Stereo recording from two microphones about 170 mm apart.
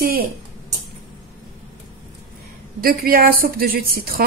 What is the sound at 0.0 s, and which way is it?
Speech, 65° right (ahead or behind).